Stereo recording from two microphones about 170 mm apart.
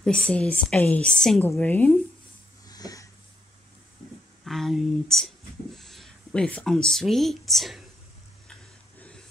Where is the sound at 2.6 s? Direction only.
20° left (ahead or behind).